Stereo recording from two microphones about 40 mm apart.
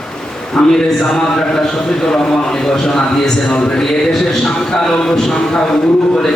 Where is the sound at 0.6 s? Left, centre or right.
Left.